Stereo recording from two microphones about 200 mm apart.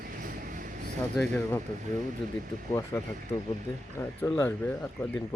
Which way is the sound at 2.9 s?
10° left (ahead or behind).